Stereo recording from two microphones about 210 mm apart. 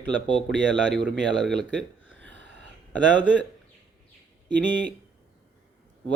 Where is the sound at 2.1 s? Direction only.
60° right (ahead or behind).